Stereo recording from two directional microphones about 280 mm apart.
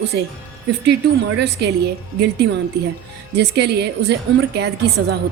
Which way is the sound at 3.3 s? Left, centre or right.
Right.